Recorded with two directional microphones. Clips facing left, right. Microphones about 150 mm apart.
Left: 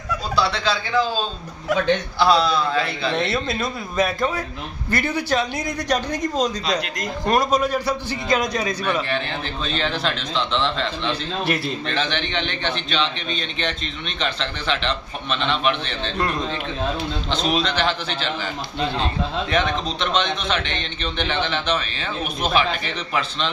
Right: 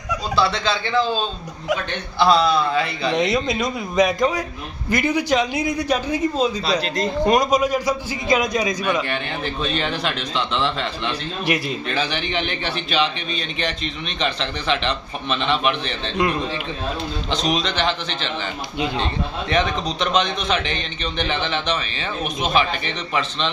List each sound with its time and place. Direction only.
0.4 s a man's voice: 5° left (ahead or behind)
2.1 s a man's voice: centre (ahead or behind)
3.3 s a man's voice: 15° right (ahead or behind)
17.4 s a man's voice: 5° left (ahead or behind)
19.5 s a man's voice: centre (ahead or behind)